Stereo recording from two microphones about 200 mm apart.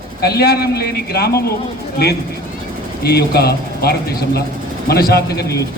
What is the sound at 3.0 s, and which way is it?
Speech, 55° left (ahead or behind).